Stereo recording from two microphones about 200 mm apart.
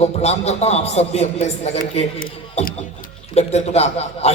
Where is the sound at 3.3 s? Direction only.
30° left (ahead or behind).